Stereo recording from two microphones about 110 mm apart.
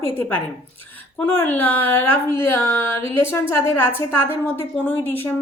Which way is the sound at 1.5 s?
15° left (ahead or behind).